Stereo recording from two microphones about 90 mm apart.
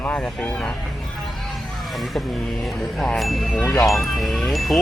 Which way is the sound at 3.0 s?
Centre (ahead or behind).